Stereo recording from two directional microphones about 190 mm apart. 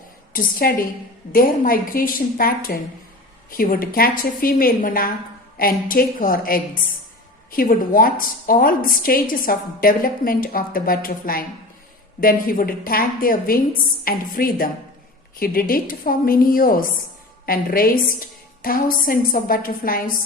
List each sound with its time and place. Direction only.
0.3 s a woman's voice: 50° left (ahead or behind)